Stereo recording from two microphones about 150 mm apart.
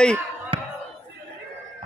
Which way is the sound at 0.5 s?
35° right (ahead or behind).